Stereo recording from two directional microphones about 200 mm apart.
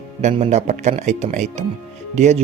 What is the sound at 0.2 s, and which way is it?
Speech, 30° right (ahead or behind).